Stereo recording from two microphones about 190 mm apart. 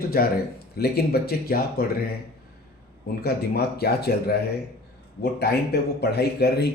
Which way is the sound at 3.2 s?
55° left (ahead or behind).